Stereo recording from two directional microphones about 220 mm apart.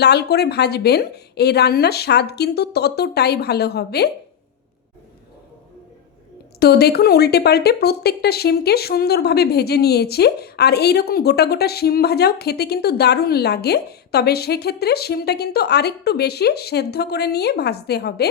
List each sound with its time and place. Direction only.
0.0 s speech: 50° left (ahead or behind)
6.6 s speech: 45° left (ahead or behind)